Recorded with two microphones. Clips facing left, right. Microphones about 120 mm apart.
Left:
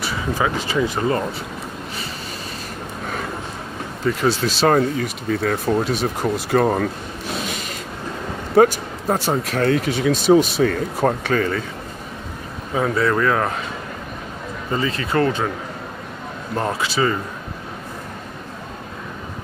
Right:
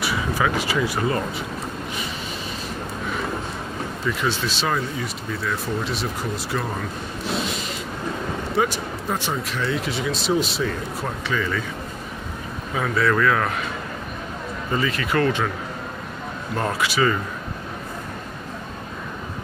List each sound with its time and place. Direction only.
0.7 s speech: 25° left (ahead or behind)
4.0 s speech: 40° left (ahead or behind)
4.9 s speech: 65° left (ahead or behind)
8.5 s speech: 45° left (ahead or behind)
12.7 s speech: 25° left (ahead or behind)
14.7 s speech: 30° left (ahead or behind)
16.5 s speech: 25° left (ahead or behind)